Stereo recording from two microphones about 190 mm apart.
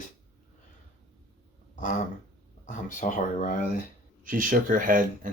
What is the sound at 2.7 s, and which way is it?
Speech, 40° left (ahead or behind).